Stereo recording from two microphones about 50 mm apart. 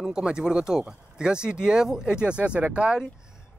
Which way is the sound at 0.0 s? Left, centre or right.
Centre.